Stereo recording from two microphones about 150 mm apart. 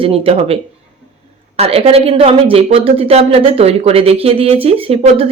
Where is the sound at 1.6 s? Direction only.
40° right (ahead or behind).